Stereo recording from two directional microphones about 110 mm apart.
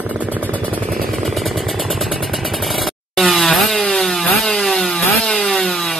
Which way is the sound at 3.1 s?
Centre (ahead or behind).